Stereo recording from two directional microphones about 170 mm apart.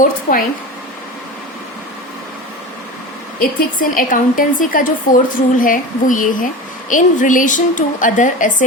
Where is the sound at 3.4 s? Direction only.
55° left (ahead or behind).